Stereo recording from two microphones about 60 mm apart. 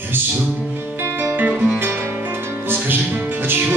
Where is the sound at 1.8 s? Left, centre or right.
Right.